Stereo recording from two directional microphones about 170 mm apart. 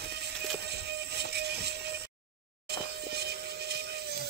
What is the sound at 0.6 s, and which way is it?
Music, 75° right (ahead or behind).